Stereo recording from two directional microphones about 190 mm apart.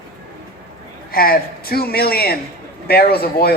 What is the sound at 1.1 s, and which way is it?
A woman's voice, 50° left (ahead or behind).